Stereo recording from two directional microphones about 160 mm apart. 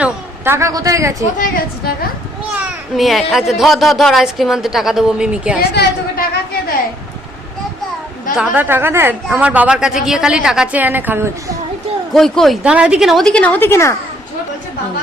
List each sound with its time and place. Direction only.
0.0 s a woman's voice: 15° right (ahead or behind)
1.4 s a woman's voice: 60° left (ahead or behind)
2.9 s a woman's voice: centre (ahead or behind)
5.7 s a sound: 90° left
8.4 s speech: 10° right (ahead or behind)
12.1 s a woman's voice: centre (ahead or behind)